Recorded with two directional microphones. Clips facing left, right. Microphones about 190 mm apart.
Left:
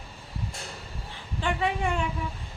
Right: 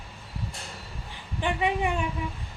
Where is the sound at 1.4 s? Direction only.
15° right (ahead or behind).